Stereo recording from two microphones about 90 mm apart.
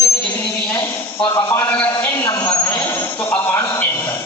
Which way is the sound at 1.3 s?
35° left (ahead or behind).